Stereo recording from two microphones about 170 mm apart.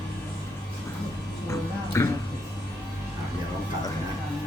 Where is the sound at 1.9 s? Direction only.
15° left (ahead or behind).